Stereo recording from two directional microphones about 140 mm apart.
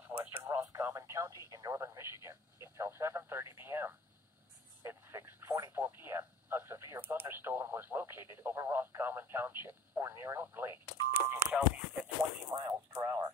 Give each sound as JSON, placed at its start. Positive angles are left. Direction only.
{"t": 0.1, "sound": "radio", "side_deg": -15}
{"t": 0.5, "sound": "speech", "side_deg": -20}
{"t": 4.8, "sound": "radio", "side_deg": -20}
{"t": 11.2, "sound": "a sound", "side_deg": -10}
{"t": 12.5, "sound": "radio", "side_deg": -25}